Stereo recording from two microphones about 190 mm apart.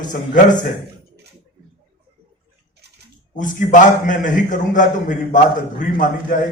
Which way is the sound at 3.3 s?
40° left (ahead or behind).